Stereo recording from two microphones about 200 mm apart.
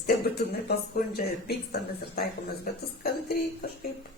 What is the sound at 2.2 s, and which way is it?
Speech, 50° left (ahead or behind).